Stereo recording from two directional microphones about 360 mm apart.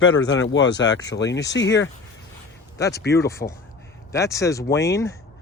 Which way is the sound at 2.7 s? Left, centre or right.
Centre.